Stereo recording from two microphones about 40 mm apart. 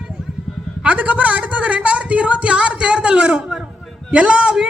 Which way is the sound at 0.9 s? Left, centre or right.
Right.